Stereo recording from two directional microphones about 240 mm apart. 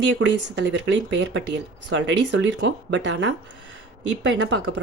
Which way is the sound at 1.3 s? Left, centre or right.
Right.